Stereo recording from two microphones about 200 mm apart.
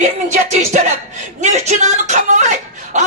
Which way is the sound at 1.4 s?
35° right (ahead or behind).